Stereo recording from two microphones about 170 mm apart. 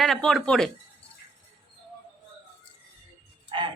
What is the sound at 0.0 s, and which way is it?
Speech, centre (ahead or behind).